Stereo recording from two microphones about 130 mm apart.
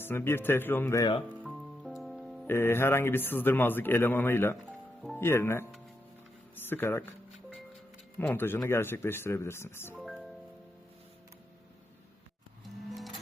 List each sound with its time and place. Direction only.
0.0 s speech: 15° left (ahead or behind)
1.4 s music: centre (ahead or behind)
2.5 s speech: 20° left (ahead or behind)
8.2 s speech: 15° left (ahead or behind)